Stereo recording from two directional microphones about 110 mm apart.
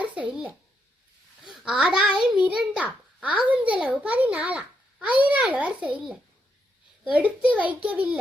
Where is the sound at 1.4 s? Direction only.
10° right (ahead or behind).